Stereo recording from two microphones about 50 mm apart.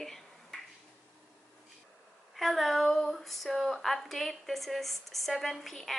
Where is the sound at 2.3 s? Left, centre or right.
Centre.